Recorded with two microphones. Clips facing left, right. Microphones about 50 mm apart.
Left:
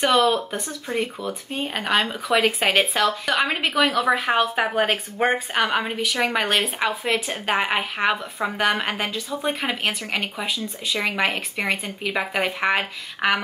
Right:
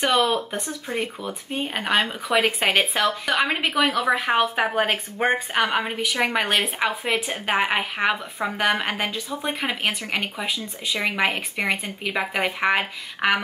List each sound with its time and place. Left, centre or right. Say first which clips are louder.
0.0 s speech: left 2 dB; centre
0.3 s speech: left 1 dB; centre